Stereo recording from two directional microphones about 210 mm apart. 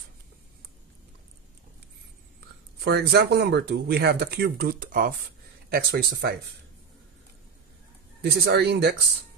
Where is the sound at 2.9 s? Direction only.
50° right (ahead or behind).